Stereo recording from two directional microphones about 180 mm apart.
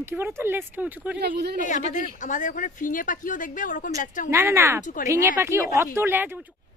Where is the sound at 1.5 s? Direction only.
45° left (ahead or behind).